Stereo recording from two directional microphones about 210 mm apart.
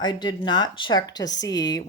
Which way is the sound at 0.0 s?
20° left (ahead or behind).